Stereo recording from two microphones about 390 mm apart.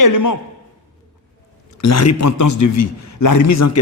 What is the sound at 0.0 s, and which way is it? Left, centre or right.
Speech, left.